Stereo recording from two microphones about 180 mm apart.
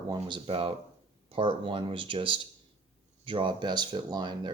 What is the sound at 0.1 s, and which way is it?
Speech, 25° right (ahead or behind).